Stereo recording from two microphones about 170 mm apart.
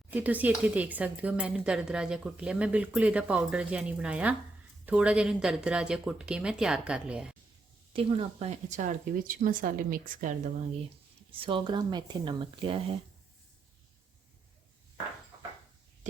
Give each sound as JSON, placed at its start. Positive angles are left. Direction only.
{"t": 0.1, "sound": "speech", "side_deg": -10}
{"t": 7.9, "sound": "a woman's voice", "side_deg": -35}
{"t": 11.3, "sound": "speech", "side_deg": -30}